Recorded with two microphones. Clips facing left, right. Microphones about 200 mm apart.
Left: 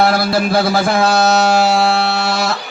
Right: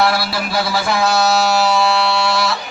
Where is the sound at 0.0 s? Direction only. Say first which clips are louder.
Left 4 dB; 50° left (ahead or behind).